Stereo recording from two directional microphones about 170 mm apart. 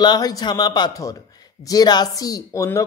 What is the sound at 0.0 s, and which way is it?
Speech, 25° left (ahead or behind).